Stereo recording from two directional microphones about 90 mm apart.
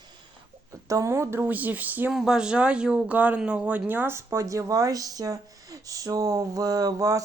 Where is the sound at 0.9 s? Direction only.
35° right (ahead or behind); by 2.1 s 20° right (ahead or behind).